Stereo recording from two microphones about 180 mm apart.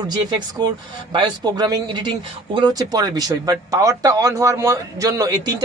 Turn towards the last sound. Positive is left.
turn(degrees=-20)  # may be behind; listen again after turning